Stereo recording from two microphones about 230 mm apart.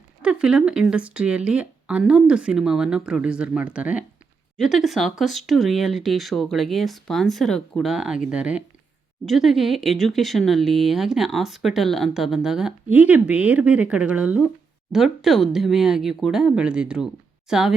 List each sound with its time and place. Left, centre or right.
0.2 s speech: centre